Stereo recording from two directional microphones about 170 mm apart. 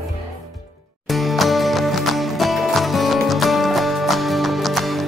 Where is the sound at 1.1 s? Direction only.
Centre (ahead or behind).